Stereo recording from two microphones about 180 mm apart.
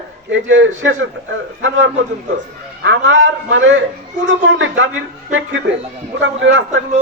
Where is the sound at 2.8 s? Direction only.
90° right.